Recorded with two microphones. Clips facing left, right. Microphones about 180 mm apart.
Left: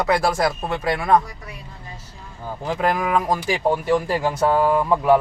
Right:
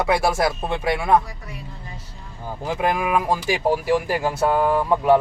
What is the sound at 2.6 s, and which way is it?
Speech, 10° right (ahead or behind).